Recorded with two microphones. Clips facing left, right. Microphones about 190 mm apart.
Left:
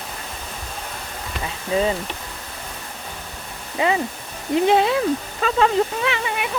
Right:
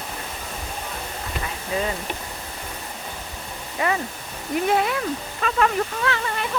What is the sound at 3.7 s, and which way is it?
Speech, 20° left (ahead or behind).